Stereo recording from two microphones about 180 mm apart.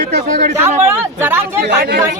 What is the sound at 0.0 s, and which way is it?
Speech, 40° right (ahead or behind).